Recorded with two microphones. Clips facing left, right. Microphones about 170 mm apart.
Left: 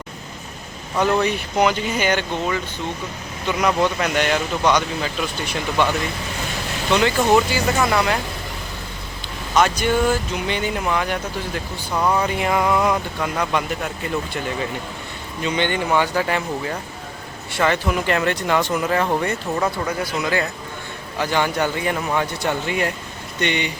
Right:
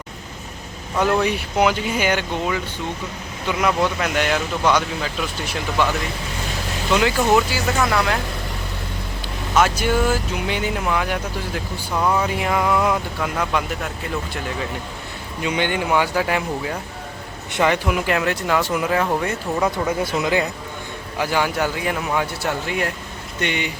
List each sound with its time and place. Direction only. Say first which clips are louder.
0.9 s speech: even; 5° right (ahead or behind)
6.9 s speech: left 1 dB; 5° right (ahead or behind)
9.6 s speech: even; 5° right (ahead or behind)
15.4 s speech: even; 10° right (ahead or behind)
20.0 s speech: right 1 dB; 25° right (ahead or behind)
21.2 s speech: even; 5° right (ahead or behind)